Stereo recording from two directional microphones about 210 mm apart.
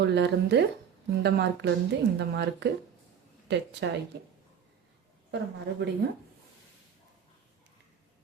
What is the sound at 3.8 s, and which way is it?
Speech, 55° right (ahead or behind).